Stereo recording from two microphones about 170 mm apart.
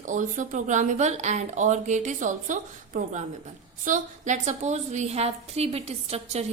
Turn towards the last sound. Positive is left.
turn(degrees=-35)  # may be behind; listen again after turning